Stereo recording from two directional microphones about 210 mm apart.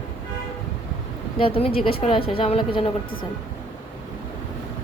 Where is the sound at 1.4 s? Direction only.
25° left (ahead or behind).